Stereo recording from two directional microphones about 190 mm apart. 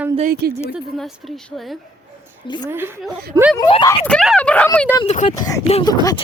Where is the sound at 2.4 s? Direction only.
25° left (ahead or behind).